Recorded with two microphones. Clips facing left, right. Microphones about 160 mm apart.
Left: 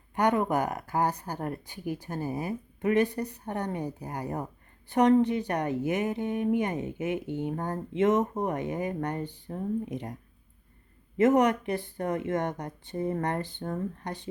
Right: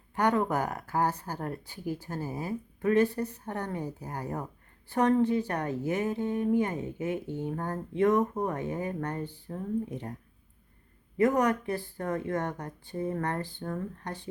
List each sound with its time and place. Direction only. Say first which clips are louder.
0.2 s speech: left 1 dB; 15° left (ahead or behind)
11.2 s speech: left 3 dB; 20° left (ahead or behind)